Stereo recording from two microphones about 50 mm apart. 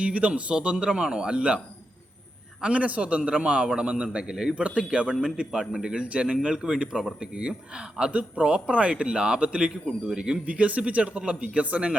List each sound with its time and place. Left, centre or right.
0.0 s a man's voice: right
10.4 s a man's voice: right